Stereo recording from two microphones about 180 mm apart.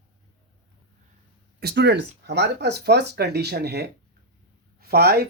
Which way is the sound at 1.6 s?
70° right (ahead or behind).